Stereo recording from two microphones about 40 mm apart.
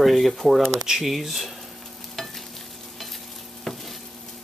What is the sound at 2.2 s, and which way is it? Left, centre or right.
Stir, centre.